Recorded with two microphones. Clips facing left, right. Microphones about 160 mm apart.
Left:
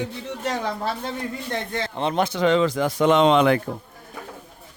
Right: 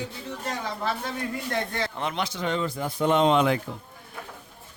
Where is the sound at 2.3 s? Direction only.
90° left; by 3.7 s 70° left (ahead or behind).